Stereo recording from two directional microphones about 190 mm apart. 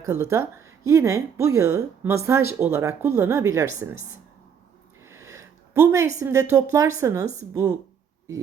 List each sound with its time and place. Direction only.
0.0 s speech: 15° right (ahead or behind)
5.0 s sniff: 15° right (ahead or behind)
6.1 s speech: 15° right (ahead or behind)